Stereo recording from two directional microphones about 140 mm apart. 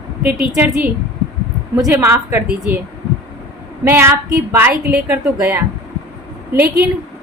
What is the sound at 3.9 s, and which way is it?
A woman's voice, 15° right (ahead or behind).